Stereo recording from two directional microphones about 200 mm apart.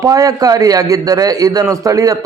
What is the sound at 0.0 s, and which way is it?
A man's voice, 15° right (ahead or behind).